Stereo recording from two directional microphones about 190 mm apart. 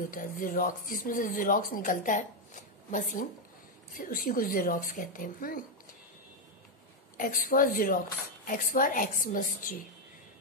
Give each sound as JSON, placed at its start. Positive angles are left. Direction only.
{"t": 0.1, "sound": "speech", "side_deg": 45}
{"t": 7.2, "sound": "speech", "side_deg": 45}